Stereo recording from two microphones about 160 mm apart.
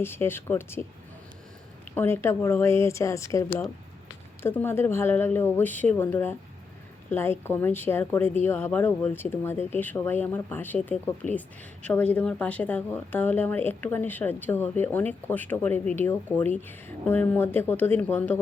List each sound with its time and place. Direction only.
0.0 s speech: 15° left (ahead or behind)
2.0 s speech: 15° left (ahead or behind)